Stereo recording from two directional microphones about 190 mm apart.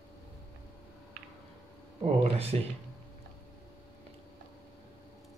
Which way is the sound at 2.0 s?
35° right (ahead or behind).